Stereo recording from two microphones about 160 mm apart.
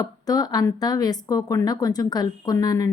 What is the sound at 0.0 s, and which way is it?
Speech, 25° left (ahead or behind).